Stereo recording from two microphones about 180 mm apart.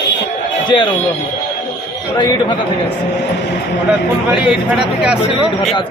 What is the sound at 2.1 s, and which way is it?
Speech, 25° left (ahead or behind).